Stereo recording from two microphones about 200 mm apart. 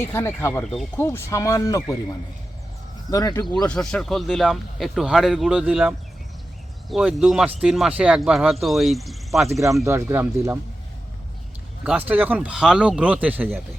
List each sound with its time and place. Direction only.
0.0 s speech: 10° left (ahead or behind)
0.6 s speech: centre (ahead or behind)
0.9 s speech: 10° left (ahead or behind)
3.1 s speech: 15° left (ahead or behind)
3.7 s speech: 5° left (ahead or behind)
9.8 s speech: 10° right (ahead or behind)
11.9 s speech: 10° right (ahead or behind)